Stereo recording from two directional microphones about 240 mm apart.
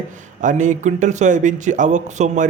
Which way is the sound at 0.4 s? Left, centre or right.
Right.